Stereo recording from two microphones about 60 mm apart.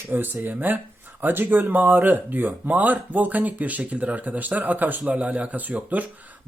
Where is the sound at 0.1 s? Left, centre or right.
Right.